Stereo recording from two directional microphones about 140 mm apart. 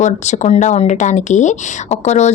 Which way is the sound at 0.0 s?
55° left (ahead or behind).